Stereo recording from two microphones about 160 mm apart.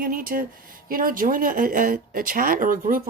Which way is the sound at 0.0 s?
65° right (ahead or behind).